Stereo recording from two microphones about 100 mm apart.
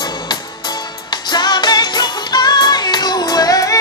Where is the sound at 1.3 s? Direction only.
45° left (ahead or behind).